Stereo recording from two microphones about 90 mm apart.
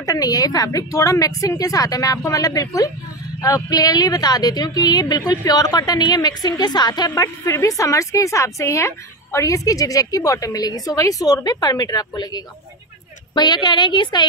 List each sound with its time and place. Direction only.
0.0 s a woman's voice: 45° left (ahead or behind); by 14.2 s 60° left (ahead or behind)